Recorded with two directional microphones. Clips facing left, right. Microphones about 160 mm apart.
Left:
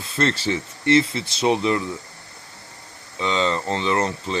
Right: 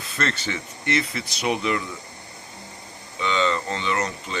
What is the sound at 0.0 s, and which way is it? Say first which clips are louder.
Speech: left 5 dB; 30° left (ahead or behind).